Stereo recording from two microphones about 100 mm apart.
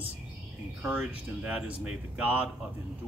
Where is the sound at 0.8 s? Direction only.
15° right (ahead or behind).